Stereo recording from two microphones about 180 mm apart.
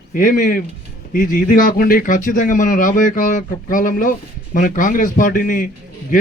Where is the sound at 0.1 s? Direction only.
50° left (ahead or behind).